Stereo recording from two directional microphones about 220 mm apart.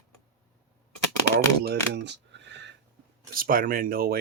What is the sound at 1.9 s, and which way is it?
Cutlery, 50° right (ahead or behind).